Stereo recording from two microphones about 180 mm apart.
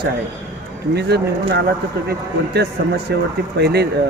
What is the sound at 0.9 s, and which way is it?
Speech, 65° right (ahead or behind).